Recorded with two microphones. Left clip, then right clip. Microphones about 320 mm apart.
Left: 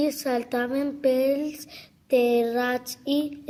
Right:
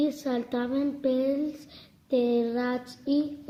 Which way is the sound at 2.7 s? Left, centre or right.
Left.